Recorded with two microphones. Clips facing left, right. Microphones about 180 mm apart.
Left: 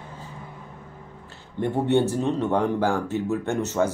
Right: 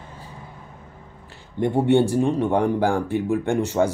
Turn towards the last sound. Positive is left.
turn(degrees=-15)  # may be behind; listen again after turning